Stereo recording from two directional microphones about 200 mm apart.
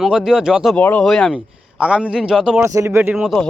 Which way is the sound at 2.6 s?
15° right (ahead or behind).